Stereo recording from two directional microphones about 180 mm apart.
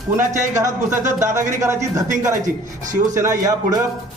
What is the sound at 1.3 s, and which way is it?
A man's voice, 15° right (ahead or behind).